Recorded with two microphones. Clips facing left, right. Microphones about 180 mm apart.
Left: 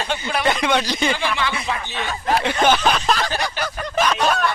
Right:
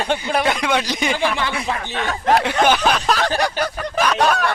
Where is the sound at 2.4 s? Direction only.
10° right (ahead or behind).